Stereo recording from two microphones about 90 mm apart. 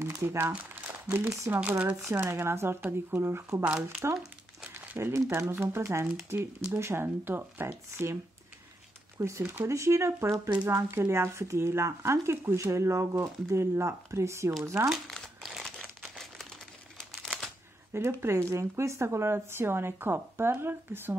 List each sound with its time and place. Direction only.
0.0 s crumpling: 35° right (ahead or behind)
0.7 s crumpling: 20° right (ahead or behind)
1.5 s speech: 20° right (ahead or behind)
3.6 s speech: 15° right (ahead or behind)
4.9 s speech: 30° right (ahead or behind)
9.5 s speech: 30° right (ahead or behind)
15.1 s crumpling: 5° right (ahead or behind)
17.1 s a sound: 5° left (ahead or behind)
17.9 s speech: 30° right (ahead or behind)